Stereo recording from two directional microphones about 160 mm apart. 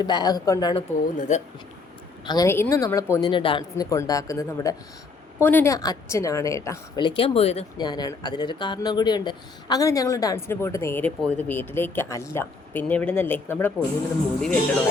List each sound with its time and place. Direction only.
0.0 s speech: 25° left (ahead or behind)
0.9 s speech: 55° left (ahead or behind)
2.2 s speech: 25° left (ahead or behind); by 7.6 s 40° left (ahead or behind)
7.8 s speech: 25° left (ahead or behind)